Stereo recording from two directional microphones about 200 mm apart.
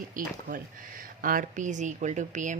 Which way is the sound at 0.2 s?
45° right (ahead or behind).